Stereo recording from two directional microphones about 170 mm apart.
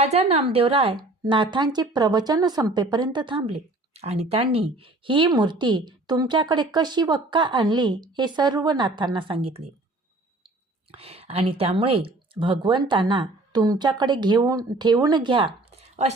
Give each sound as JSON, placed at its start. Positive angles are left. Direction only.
{"t": 0.0, "sound": "a woman's voice", "side_deg": -40}
{"t": 10.9, "sound": "speech", "side_deg": -35}